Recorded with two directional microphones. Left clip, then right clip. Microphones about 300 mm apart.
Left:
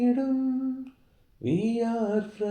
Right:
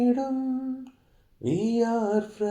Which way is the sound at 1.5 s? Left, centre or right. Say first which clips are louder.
Right 2 dB; right.